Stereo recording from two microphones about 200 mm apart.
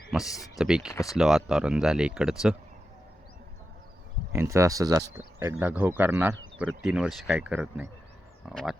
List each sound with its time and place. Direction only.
0.3 s speech: 15° left (ahead or behind)
0.6 s speech: 5° right (ahead or behind)
0.9 s speech: 15° left (ahead or behind)
1.1 s speech: centre (ahead or behind)
4.3 s speech: 15° right (ahead or behind)